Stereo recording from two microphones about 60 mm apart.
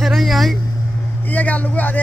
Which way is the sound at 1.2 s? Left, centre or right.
Left.